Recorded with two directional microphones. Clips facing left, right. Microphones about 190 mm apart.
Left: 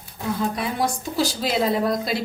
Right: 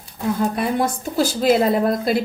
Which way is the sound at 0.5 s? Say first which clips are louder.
Right 4 dB; 50° right (ahead or behind).